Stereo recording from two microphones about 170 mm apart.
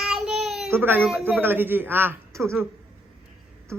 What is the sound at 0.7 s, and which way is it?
A man's voice, 15° right (ahead or behind).